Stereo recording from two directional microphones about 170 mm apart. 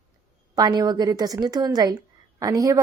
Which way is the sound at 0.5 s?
20° right (ahead or behind).